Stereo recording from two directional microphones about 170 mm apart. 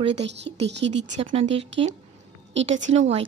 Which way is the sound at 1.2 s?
35° right (ahead or behind).